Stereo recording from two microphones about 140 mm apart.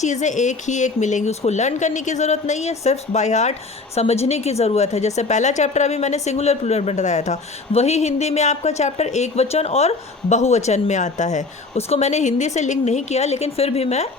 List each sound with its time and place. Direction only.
0.0 s a woman's voice: 60° left (ahead or behind)